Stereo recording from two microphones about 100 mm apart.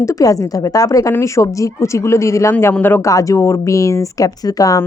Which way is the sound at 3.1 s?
35° left (ahead or behind).